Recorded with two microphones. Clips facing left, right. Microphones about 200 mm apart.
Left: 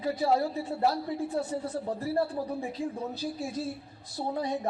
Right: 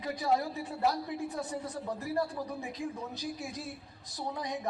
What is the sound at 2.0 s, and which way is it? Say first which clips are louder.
Speech: left 4 dB; 35° left (ahead or behind).